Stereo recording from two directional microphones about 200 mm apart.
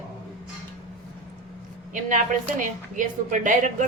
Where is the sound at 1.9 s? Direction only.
40° right (ahead or behind).